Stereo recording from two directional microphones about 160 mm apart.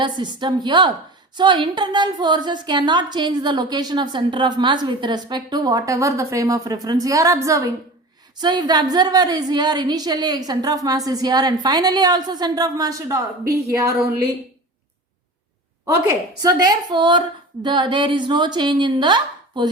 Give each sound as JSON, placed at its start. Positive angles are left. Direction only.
{"t": 0.0, "sound": "a woman's voice", "side_deg": -30}
{"t": 16.0, "sound": "a woman's voice", "side_deg": -25}